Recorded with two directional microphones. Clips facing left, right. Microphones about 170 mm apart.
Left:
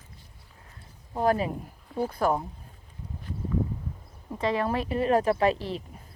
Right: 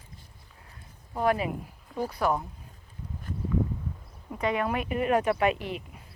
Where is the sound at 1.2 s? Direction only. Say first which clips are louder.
Left 1 dB; 35° left (ahead or behind).